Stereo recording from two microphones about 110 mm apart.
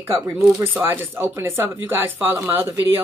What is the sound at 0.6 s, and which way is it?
Speech, 15° right (ahead or behind).